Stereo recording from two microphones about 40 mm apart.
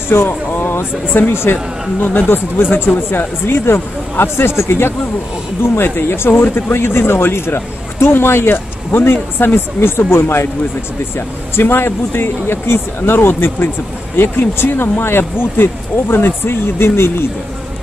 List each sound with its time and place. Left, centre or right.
0.1 s speech: left
1.3 s speech: left
2.0 s speech: left
3.1 s speech: left
5.9 s speech: left
11.6 s speech: left